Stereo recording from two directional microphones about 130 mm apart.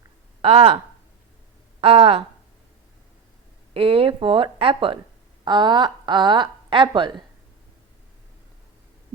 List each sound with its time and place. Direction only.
0.4 s speech: 45° right (ahead or behind)
1.8 s speech: 50° right (ahead or behind)
3.8 s a woman's voice: 45° right (ahead or behind)